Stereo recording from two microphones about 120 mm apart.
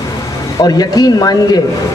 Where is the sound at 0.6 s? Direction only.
35° left (ahead or behind).